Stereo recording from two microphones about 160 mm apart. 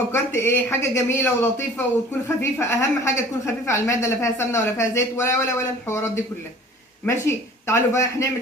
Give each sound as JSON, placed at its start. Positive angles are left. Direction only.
{"t": 0.1, "sound": "a woman's voice", "side_deg": 15}